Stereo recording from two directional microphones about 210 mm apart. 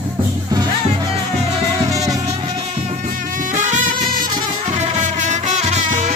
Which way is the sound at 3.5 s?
35° right (ahead or behind).